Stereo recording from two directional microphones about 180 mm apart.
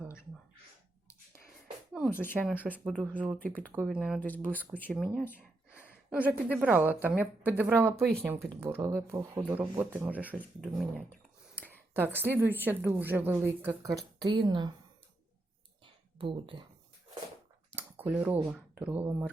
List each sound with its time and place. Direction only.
2.0 s speech: 10° left (ahead or behind)
2.3 s a woman's voice: 5° right (ahead or behind)
3.3 s speech: 10° left (ahead or behind)
3.8 s speech: 5° right (ahead or behind)
4.2 s speech: 10° left (ahead or behind)
5.3 s a woman's voice: 5° right (ahead or behind); by 14.7 s 25° right (ahead or behind)
16.1 s speech: 30° right (ahead or behind)
17.7 s a sound: 10° right (ahead or behind)
18.8 s a woman's voice: 10° right (ahead or behind)